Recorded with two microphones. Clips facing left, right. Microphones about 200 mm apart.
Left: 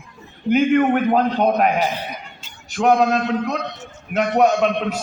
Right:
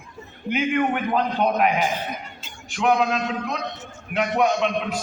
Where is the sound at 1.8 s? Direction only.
50° right (ahead or behind).